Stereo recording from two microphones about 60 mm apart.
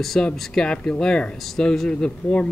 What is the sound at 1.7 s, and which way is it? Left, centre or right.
Speech, centre.